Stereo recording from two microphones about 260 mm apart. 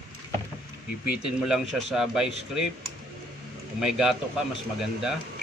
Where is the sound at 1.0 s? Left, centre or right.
Centre.